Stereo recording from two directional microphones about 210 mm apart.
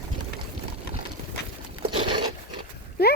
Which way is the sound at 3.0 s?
50° left (ahead or behind).